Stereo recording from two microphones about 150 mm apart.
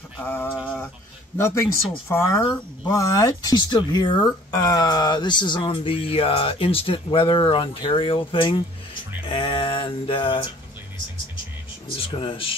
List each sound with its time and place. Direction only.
0.2 s a sound: 15° left (ahead or behind)
1.4 s speech: 20° left (ahead or behind); by 10.5 s 35° left (ahead or behind)
12.0 s speech: 35° left (ahead or behind)